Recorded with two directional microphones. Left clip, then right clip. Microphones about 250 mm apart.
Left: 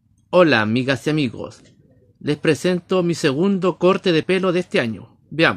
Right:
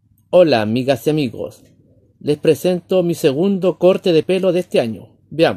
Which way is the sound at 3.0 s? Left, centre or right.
Centre.